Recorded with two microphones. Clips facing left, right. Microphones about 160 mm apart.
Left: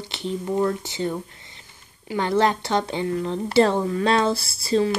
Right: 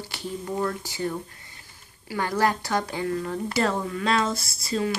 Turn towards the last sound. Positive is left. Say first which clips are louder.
# left 6 dB
turn(degrees=30)  # may be behind; listen again after turning